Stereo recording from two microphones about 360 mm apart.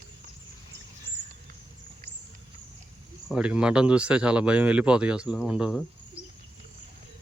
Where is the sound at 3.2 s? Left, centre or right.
Centre.